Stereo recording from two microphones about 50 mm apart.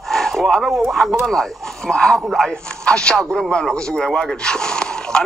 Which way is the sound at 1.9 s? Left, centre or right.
Centre.